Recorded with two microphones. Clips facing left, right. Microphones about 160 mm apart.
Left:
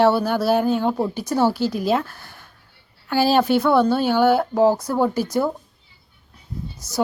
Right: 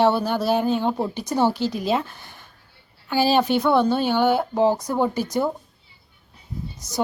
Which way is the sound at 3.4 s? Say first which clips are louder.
Left 3 dB; 5° left (ahead or behind).